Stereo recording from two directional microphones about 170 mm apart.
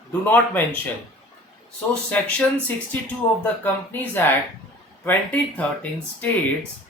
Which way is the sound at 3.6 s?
10° left (ahead or behind).